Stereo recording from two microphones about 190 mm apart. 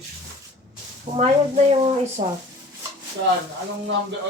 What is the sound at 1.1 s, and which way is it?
Speech, 35° right (ahead or behind).